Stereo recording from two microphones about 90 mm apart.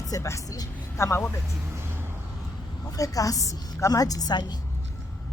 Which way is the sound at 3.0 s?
40° left (ahead or behind).